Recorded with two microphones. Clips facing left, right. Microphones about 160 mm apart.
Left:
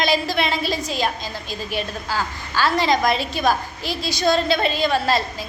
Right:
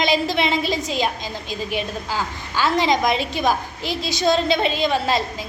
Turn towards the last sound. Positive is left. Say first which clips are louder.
# even
turn(degrees=-15)  # may be behind; listen again after turning